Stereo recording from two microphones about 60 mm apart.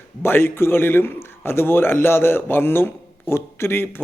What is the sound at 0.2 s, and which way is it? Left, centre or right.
A man's voice, left.